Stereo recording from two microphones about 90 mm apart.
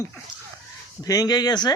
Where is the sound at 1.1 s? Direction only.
45° left (ahead or behind).